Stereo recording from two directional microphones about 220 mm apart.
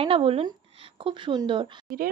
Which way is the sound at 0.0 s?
25° right (ahead or behind).